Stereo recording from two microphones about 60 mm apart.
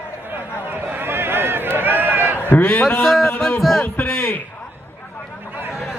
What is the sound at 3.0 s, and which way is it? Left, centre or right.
Speech, centre.